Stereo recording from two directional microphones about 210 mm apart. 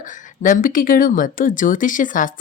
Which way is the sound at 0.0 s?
40° left (ahead or behind).